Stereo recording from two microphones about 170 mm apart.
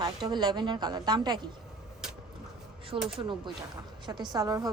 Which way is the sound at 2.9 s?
30° right (ahead or behind).